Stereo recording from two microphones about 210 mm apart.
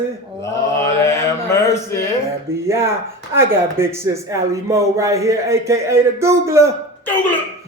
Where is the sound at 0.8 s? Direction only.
15° left (ahead or behind).